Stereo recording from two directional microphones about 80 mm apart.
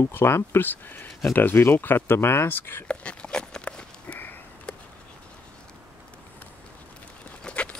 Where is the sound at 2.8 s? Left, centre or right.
Centre.